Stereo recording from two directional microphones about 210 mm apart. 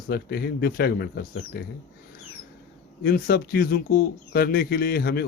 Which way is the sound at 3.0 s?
45° left (ahead or behind).